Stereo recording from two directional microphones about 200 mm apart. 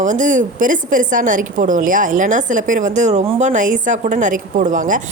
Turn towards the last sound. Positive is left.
turn(degrees=-40)  # may be behind; listen again after turning